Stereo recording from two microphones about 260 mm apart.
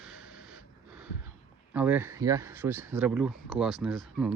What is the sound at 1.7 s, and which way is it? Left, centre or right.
Speech, centre.